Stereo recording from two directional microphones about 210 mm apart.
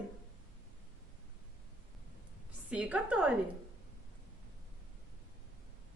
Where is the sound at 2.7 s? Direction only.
5° right (ahead or behind).